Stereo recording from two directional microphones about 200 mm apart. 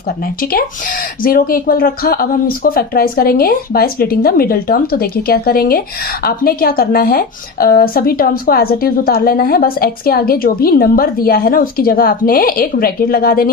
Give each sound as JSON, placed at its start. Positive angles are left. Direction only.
{"t": 1.2, "sound": "a woman's voice", "side_deg": 45}